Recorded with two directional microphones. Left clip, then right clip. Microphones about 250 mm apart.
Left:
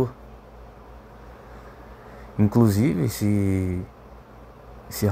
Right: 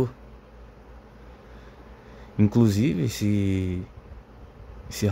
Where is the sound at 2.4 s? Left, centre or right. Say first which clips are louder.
Left 2 dB; centre.